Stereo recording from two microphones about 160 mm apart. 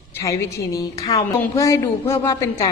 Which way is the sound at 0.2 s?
20° left (ahead or behind).